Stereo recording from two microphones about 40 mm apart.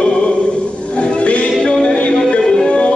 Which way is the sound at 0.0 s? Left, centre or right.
Left.